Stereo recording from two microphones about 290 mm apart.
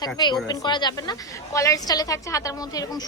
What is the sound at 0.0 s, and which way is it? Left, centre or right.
Speech, centre.